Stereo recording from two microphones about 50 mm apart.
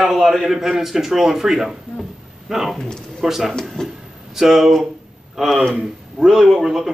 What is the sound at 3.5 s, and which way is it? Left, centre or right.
Speech, centre.